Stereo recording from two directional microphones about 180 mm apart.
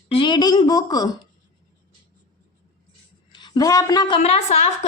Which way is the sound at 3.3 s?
25° left (ahead or behind).